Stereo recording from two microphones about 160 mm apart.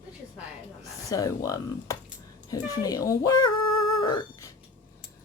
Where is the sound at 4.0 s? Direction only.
30° left (ahead or behind).